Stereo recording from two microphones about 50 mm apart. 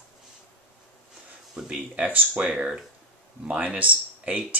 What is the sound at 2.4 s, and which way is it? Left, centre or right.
Speech, centre.